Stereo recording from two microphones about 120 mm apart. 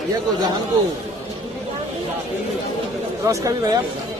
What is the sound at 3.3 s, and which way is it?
Speech, 30° right (ahead or behind).